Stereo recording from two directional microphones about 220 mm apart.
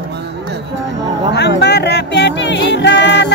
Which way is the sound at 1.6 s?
50° left (ahead or behind).